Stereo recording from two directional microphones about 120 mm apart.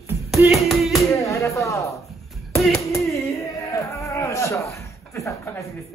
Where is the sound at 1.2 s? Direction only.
25° left (ahead or behind).